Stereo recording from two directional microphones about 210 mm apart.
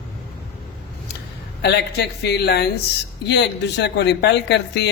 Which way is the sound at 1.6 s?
55° left (ahead or behind).